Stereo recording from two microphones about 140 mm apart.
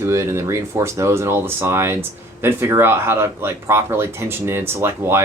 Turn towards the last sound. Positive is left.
turn(degrees=-20)  # may be behind; listen again after turning